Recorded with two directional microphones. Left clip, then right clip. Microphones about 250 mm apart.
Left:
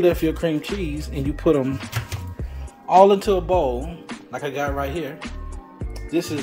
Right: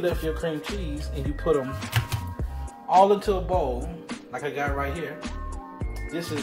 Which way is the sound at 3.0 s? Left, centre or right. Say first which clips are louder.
Left 5 dB; left.